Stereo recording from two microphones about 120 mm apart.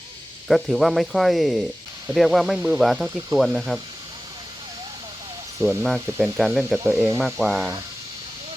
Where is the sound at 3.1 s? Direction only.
25° right (ahead or behind).